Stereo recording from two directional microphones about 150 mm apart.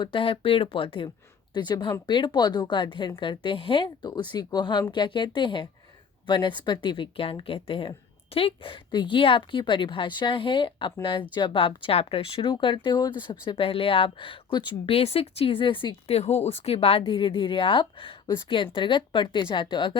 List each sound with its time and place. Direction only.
0.0 s speech: 35° left (ahead or behind)